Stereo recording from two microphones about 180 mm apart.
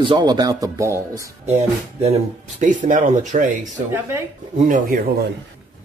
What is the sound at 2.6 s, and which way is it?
Speech, 45° right (ahead or behind).